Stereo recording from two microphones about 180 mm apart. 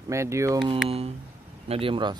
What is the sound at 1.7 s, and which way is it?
Speech, 30° right (ahead or behind).